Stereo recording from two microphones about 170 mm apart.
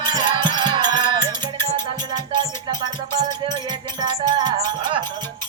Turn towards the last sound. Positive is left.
turn(degrees=-25)  # may be behind; listen again after turning